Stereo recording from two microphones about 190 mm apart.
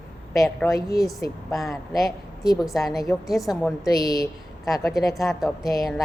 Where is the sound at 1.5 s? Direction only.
Centre (ahead or behind).